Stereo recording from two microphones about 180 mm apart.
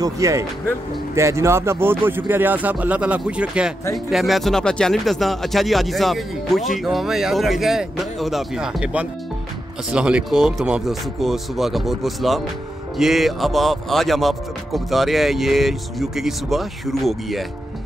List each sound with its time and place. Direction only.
0.0 s speech: 20° right (ahead or behind); by 17.5 s centre (ahead or behind)